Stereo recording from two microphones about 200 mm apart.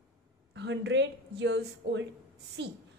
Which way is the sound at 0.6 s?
60° right (ahead or behind).